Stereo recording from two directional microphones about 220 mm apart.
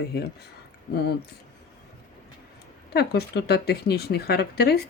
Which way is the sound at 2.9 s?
45° left (ahead or behind).